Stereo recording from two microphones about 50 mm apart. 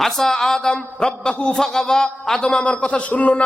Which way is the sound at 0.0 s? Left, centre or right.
Centre.